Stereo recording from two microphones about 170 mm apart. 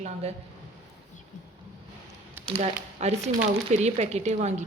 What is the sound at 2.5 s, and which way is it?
Speech, 35° right (ahead or behind).